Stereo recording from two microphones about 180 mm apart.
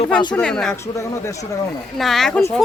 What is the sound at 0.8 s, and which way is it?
Speech, 15° left (ahead or behind).